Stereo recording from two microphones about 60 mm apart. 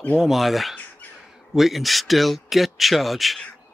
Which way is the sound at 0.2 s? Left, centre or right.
Centre.